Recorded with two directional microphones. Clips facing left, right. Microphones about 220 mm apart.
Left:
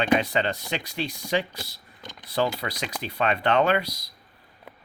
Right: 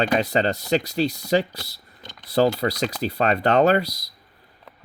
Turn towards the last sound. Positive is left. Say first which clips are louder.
# right 5 dB
turn(degrees=-35)  # may be behind; listen again after turning